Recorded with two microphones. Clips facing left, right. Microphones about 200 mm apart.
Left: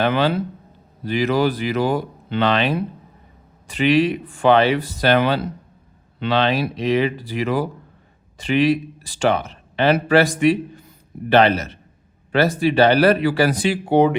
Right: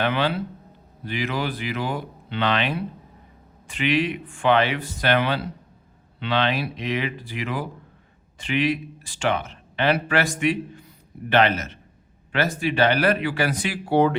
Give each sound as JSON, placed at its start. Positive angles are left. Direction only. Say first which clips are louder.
{"t": 0.0, "sound": "a man's voice", "louder": "left 5 dB", "side_deg": 40}
{"t": 13.8, "sound": "speech", "louder": "left 3 dB", "side_deg": 20}